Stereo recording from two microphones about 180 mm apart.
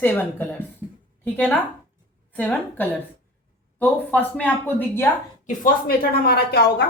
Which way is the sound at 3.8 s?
10° left (ahead or behind).